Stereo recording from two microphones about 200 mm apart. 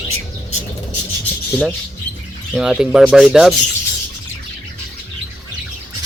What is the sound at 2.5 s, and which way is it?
Speech, 5° right (ahead or behind).